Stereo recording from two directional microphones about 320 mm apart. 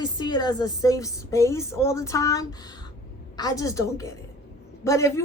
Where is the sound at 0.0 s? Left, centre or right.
Centre.